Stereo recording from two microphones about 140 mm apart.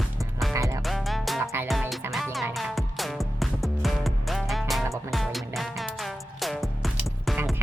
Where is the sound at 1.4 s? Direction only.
15° right (ahead or behind).